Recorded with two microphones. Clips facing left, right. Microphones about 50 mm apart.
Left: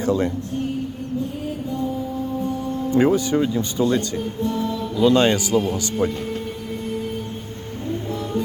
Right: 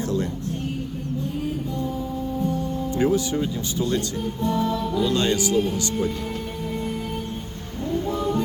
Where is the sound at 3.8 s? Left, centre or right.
Left.